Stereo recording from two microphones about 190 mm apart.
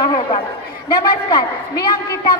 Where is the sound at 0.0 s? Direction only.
25° left (ahead or behind).